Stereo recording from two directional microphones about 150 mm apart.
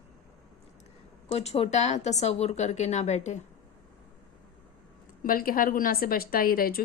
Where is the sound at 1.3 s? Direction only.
45° left (ahead or behind).